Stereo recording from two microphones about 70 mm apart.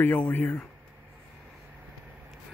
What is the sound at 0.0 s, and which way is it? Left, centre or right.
Speech, left.